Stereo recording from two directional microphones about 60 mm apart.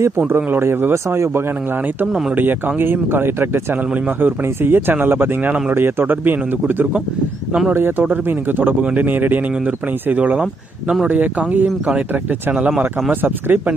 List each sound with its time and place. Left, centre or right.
0.3 s a man's voice: right
2.3 s speech: right
7.7 s speech: right
10.4 s speech: centre
11.1 s speech: right
13.1 s speech: right